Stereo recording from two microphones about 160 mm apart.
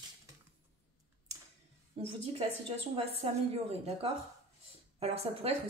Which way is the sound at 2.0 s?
35° right (ahead or behind).